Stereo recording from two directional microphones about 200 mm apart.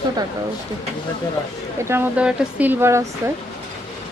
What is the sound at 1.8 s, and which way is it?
Speech, 10° right (ahead or behind).